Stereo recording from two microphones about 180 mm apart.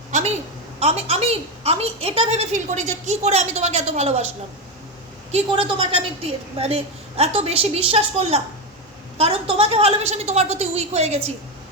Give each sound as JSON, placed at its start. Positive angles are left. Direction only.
{"t": 0.1, "sound": "a sound", "side_deg": -40}
{"t": 0.8, "sound": "a woman's voice", "side_deg": -35}
{"t": 5.3, "sound": "a woman's voice", "side_deg": -30}